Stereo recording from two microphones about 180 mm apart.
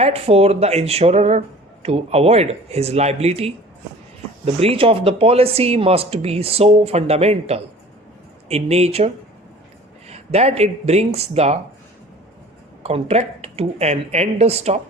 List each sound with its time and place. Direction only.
0.0 s speech: 35° right (ahead or behind)
12.8 s speech: 35° right (ahead or behind)